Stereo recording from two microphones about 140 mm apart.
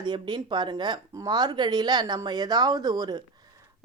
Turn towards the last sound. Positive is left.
turn(degrees=-30)  # may be behind; listen again after turning